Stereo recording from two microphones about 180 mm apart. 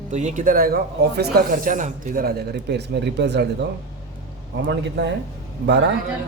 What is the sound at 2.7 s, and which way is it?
Speech, 70° right (ahead or behind).